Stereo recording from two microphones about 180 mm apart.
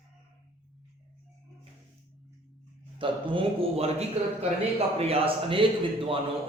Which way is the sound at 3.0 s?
30° right (ahead or behind).